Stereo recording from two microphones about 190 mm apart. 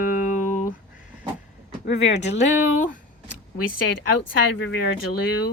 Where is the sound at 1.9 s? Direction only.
35° left (ahead or behind).